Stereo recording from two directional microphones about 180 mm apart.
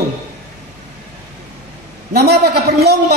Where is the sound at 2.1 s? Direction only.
60° right (ahead or behind).